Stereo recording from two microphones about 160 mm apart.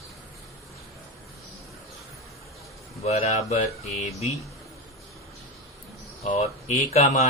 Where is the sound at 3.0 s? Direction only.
40° left (ahead or behind).